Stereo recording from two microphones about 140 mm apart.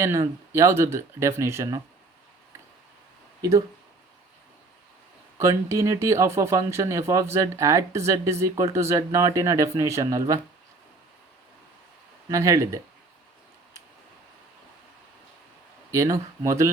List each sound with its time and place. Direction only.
0.0 s speech: 20° right (ahead or behind)
3.4 s speech: 25° right (ahead or behind)
5.4 s speech: 20° right (ahead or behind)
12.3 s speech: 25° right (ahead or behind)
15.9 s speech: 20° right (ahead or behind)